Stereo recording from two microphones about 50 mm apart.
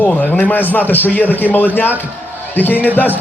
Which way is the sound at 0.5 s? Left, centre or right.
Left.